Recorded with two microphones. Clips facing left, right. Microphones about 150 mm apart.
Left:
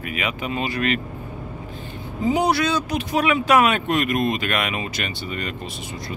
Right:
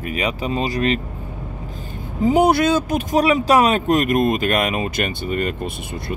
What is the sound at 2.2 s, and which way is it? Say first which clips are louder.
Speech: right 5 dB; 50° right (ahead or behind).